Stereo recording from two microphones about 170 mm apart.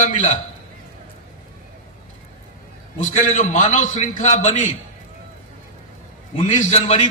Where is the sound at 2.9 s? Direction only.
45° left (ahead or behind).